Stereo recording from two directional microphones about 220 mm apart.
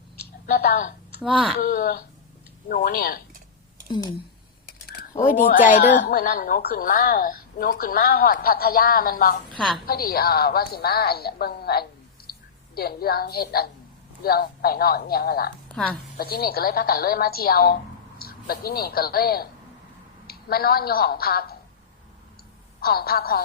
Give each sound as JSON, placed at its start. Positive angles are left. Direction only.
{"t": 0.4, "sound": "a sound", "side_deg": 45}
{"t": 1.6, "sound": "a woman's voice", "side_deg": 45}
{"t": 3.8, "sound": "speech", "side_deg": 20}
{"t": 5.2, "sound": "a woman's voice", "side_deg": 40}
{"t": 9.6, "sound": "a woman's voice", "side_deg": 0}
{"t": 9.8, "sound": "a woman's voice", "side_deg": 45}
{"t": 15.7, "sound": "a woman's voice", "side_deg": 5}
{"t": 16.1, "sound": "a woman's voice", "side_deg": 45}
{"t": 22.8, "sound": "a woman's voice", "side_deg": 45}